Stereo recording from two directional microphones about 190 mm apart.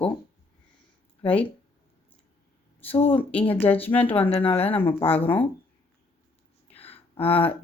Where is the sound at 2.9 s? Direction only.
30° left (ahead or behind).